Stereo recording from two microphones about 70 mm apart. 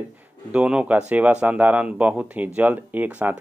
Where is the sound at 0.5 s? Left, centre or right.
Centre.